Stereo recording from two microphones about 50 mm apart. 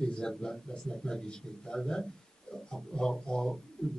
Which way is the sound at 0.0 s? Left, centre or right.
Centre.